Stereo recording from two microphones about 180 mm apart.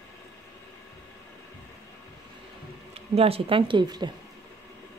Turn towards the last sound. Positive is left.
turn(degrees=-25)  # may be behind; listen again after turning